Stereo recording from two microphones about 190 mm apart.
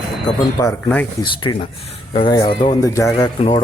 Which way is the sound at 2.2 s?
20° left (ahead or behind).